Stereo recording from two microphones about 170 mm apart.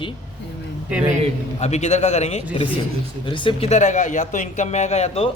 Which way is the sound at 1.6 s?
40° left (ahead or behind).